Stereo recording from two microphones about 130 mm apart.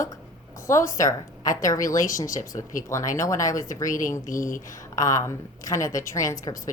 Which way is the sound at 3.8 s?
90° left.